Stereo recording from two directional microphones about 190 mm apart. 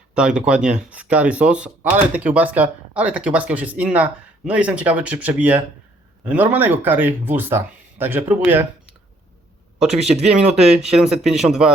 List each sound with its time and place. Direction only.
0.1 s speech: 5° right (ahead or behind)
10.1 s speech: 5° right (ahead or behind)